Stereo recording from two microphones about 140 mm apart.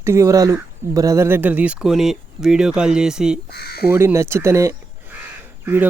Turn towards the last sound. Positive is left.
turn(degrees=-15)  # may be behind; listen again after turning